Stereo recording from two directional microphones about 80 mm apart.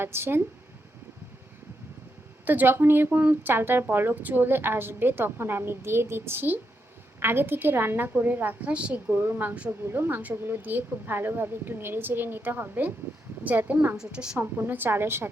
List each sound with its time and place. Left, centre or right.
0.0 s speech: right
2.4 s speech: right
9.1 s speech: right
13.9 s a woman's voice: centre
14.3 s speech: right